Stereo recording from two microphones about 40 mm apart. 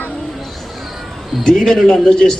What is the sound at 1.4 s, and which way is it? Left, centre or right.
Speech, centre.